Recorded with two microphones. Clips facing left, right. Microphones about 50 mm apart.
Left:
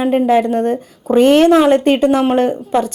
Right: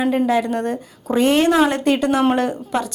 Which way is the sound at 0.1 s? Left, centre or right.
Left.